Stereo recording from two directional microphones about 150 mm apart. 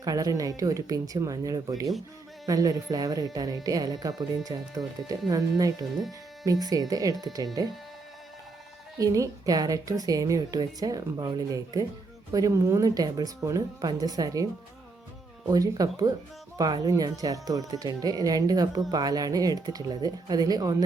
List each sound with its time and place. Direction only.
0.0 s speech: 25° right (ahead or behind)
9.0 s speech: 20° right (ahead or behind)
15.4 s speech: 25° right (ahead or behind)